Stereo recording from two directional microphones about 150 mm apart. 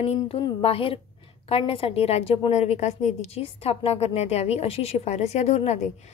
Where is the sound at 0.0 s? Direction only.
45° left (ahead or behind).